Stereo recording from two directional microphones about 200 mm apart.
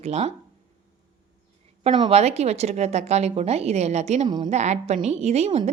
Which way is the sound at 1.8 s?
25° right (ahead or behind).